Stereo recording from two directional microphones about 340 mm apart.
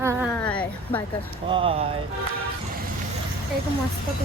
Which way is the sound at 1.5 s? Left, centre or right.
Centre.